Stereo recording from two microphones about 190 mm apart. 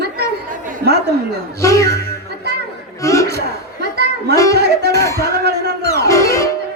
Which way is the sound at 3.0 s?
15° left (ahead or behind).